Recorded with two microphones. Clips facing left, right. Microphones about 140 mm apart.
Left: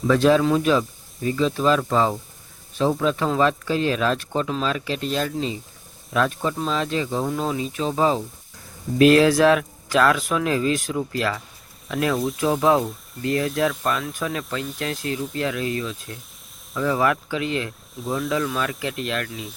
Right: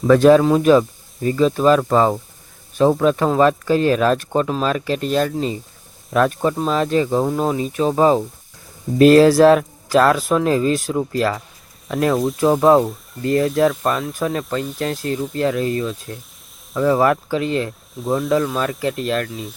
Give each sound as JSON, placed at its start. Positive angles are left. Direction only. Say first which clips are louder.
{"t": 0.1, "sound": "speech", "louder": "right 6 dB", "side_deg": -50}
{"t": 12.1, "sound": "speech", "louder": "right 5 dB", "side_deg": 0}
{"t": 12.4, "sound": "speech", "louder": "right 6 dB", "side_deg": -40}
{"t": 18.0, "sound": "speech", "louder": "right 6 dB", "side_deg": 0}
{"t": 18.3, "sound": "speech", "louder": "right 5 dB", "side_deg": -40}